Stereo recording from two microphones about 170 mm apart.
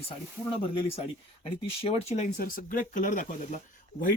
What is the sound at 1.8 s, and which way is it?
Speech, 40° left (ahead or behind).